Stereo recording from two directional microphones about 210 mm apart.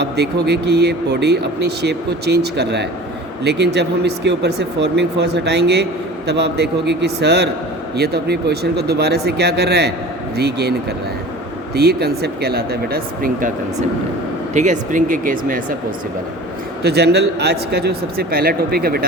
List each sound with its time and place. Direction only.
0.0 s speech: 50° right (ahead or behind)
14.5 s speech: 35° right (ahead or behind)
16.8 s speech: 50° right (ahead or behind)